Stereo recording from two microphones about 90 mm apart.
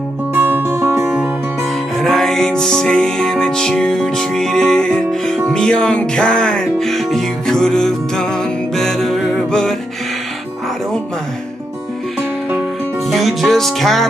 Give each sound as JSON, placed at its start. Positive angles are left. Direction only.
{"t": 0.3, "sound": "music", "side_deg": -25}
{"t": 1.6, "sound": "music", "side_deg": 0}
{"t": 13.1, "sound": "music", "side_deg": 0}